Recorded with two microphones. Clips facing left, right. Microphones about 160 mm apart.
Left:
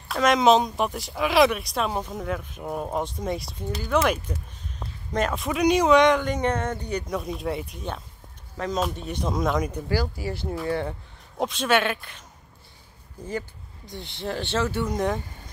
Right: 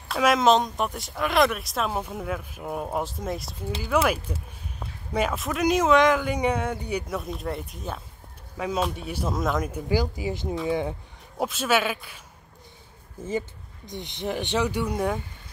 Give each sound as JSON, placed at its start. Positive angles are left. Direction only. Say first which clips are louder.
{"t": 0.1, "sound": "speech", "louder": "left 1 dB", "side_deg": 0}
{"t": 13.2, "sound": "speech", "louder": "right 3 dB", "side_deg": -20}